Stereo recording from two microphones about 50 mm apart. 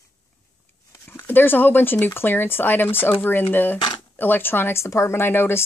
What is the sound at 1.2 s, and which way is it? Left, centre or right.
Speech, left.